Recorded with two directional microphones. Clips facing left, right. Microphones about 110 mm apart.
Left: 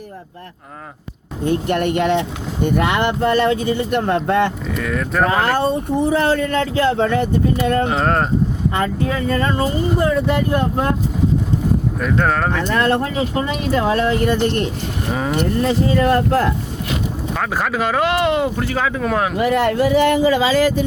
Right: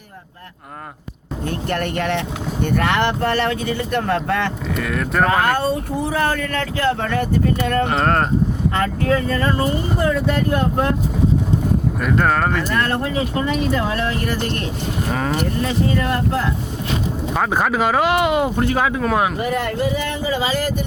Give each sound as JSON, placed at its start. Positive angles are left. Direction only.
{"t": 1.5, "sound": "speech", "side_deg": 20}
{"t": 4.8, "sound": "speech", "side_deg": 0}
{"t": 5.3, "sound": "speech", "side_deg": 30}
{"t": 7.9, "sound": "speech", "side_deg": 0}
{"t": 9.3, "sound": "speech", "side_deg": 25}
{"t": 11.9, "sound": "speech", "side_deg": -5}
{"t": 12.8, "sound": "speech", "side_deg": 25}
{"t": 16.0, "sound": "speech", "side_deg": 35}
{"t": 17.3, "sound": "speech", "side_deg": -15}
{"t": 19.4, "sound": "speech", "side_deg": 70}